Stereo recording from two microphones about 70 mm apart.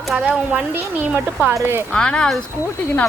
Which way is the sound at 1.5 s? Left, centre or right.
Right.